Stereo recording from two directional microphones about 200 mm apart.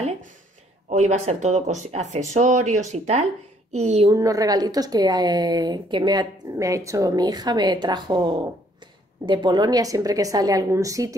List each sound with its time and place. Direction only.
0.8 s speech: 35° right (ahead or behind)
4.1 s a woman's voice: 15° right (ahead or behind)